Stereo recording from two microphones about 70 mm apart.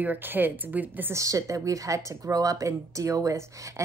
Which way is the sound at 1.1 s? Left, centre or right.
Right.